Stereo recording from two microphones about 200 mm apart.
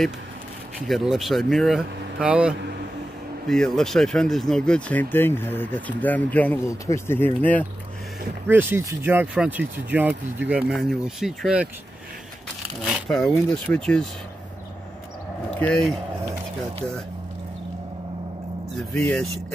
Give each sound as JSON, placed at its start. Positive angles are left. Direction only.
{"t": 0.7, "sound": "speech", "side_deg": 0}
{"t": 8.5, "sound": "speech", "side_deg": -10}
{"t": 12.8, "sound": "speech", "side_deg": 0}
{"t": 15.6, "sound": "speech", "side_deg": 0}
{"t": 18.8, "sound": "speech", "side_deg": 0}